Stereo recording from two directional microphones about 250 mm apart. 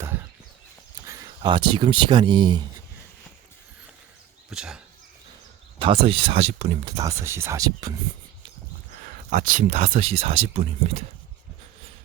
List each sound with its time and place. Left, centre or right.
1.0 s speech: centre
4.4 s speech: centre
5.8 s speech: right
9.3 s speech: right